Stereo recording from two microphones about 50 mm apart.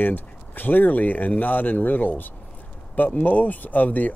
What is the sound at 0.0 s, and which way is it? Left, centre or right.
Speech, left.